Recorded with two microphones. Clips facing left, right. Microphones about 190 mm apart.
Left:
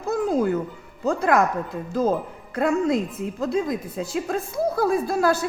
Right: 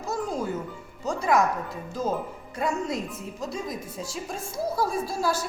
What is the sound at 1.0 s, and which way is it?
Speech, 55° left (ahead or behind).